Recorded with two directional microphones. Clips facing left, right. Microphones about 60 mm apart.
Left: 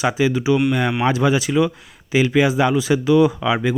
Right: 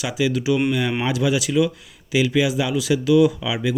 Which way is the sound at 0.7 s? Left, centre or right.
Left.